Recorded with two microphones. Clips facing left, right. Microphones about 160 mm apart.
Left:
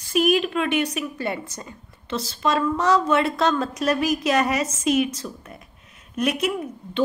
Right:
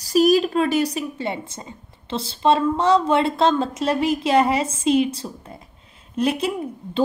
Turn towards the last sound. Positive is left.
turn(degrees=-30)  # may be behind; listen again after turning